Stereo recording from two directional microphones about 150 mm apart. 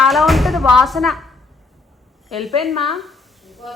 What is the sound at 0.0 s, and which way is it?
Music, centre (ahead or behind).